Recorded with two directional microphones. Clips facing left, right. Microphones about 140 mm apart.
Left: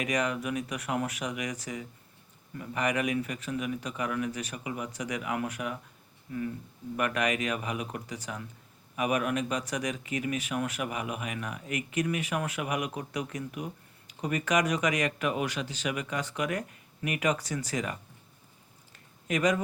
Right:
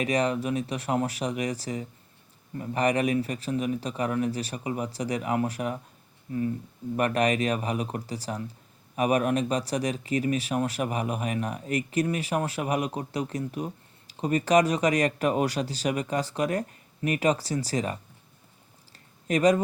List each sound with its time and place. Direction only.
0.0 s speech: 30° right (ahead or behind)
19.3 s speech: 35° right (ahead or behind)